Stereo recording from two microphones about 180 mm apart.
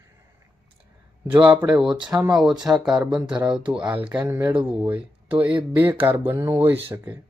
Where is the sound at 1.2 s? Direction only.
5° right (ahead or behind).